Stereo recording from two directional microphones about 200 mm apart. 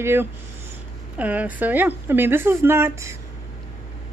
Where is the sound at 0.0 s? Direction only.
10° right (ahead or behind).